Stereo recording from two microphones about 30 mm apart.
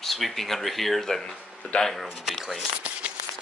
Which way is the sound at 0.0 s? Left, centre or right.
Centre.